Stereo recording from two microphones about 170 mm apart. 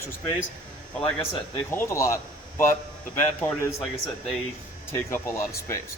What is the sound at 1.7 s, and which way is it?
Speech, 15° left (ahead or behind).